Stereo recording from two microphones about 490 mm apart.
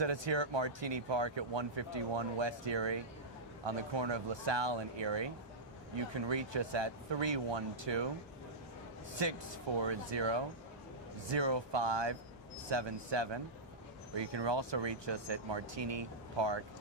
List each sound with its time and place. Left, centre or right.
0.0 s speech: right
9.8 s speech: right